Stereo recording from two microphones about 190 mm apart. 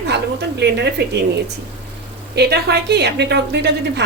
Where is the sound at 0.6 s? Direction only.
60° right (ahead or behind).